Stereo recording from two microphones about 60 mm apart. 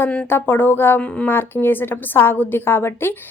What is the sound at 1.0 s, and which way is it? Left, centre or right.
Speech, centre.